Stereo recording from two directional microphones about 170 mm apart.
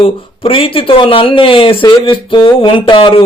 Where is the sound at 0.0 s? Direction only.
35° left (ahead or behind).